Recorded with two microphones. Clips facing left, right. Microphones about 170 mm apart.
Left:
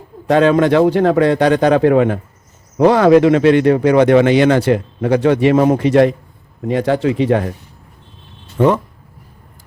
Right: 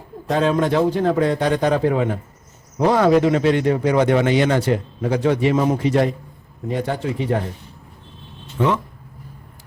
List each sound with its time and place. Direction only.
0.3 s speech: 75° left (ahead or behind)
6.7 s speech: 90° left
8.5 s speech: 50° left (ahead or behind)